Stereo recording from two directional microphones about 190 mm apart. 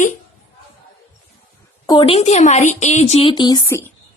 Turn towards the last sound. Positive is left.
turn(degrees=15)  # may be behind; listen again after turning